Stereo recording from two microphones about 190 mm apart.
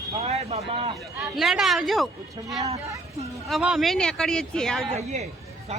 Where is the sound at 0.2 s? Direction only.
35° right (ahead or behind).